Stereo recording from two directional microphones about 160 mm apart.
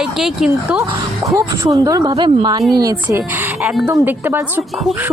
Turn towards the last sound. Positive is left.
turn(degrees=-15)  # may be behind; listen again after turning